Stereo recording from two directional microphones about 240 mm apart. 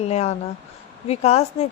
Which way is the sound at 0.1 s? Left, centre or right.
Left.